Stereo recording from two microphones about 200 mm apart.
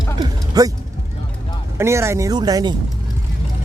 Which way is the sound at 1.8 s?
15° right (ahead or behind).